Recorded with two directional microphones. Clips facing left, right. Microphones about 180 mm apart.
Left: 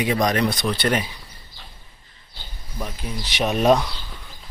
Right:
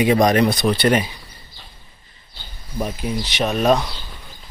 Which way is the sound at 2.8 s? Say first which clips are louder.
Right 7 dB; 15° right (ahead or behind).